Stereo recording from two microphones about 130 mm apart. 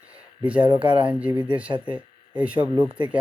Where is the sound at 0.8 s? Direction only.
40° right (ahead or behind).